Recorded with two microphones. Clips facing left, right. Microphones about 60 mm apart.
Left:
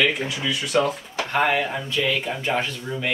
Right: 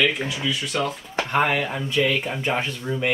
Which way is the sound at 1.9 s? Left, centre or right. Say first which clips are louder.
Right 2 dB; right.